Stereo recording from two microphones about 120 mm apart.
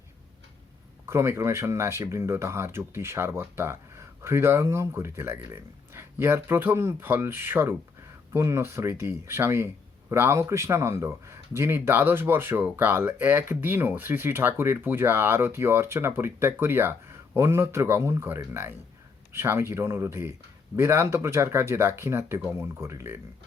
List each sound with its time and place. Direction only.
1.0 s speech: 25° right (ahead or behind)